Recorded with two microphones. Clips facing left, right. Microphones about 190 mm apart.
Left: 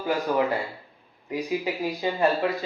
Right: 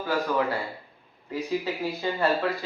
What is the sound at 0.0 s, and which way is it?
A man's voice, 20° left (ahead or behind).